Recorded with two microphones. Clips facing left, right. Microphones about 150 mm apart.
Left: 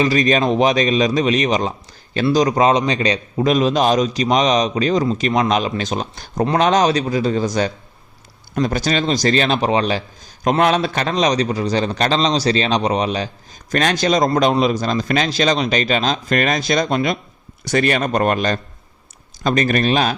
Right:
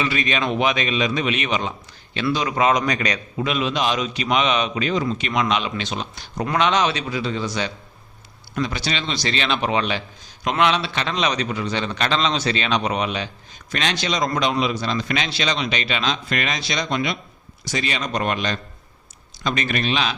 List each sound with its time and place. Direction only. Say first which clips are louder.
0.0 s a man's voice: left 7 dB; 40° left (ahead or behind)
17.7 s speech: left 8 dB; 55° left (ahead or behind)